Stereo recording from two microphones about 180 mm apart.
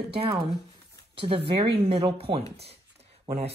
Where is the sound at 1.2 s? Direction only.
30° right (ahead or behind).